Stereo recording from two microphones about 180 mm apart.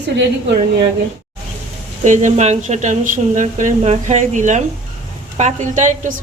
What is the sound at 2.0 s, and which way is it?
A woman's voice, 40° right (ahead or behind).